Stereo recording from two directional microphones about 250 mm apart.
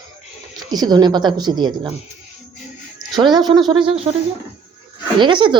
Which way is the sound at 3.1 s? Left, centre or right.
Centre.